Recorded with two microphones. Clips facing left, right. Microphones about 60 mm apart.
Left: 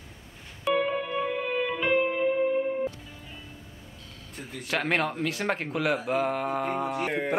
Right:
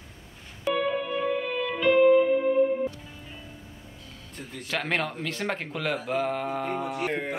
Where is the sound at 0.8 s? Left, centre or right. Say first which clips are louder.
Right 2 dB; centre.